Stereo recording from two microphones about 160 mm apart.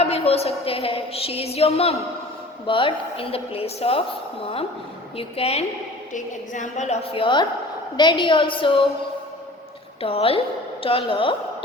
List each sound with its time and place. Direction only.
0.0 s a sound: 40° left (ahead or behind)
0.6 s a woman's voice: 35° left (ahead or behind)
5.1 s a woman's voice: 40° left (ahead or behind)
6.1 s a woman's voice: 50° left (ahead or behind); by 8.9 s 30° left (ahead or behind)
10.0 s a woman's voice: 35° left (ahead or behind)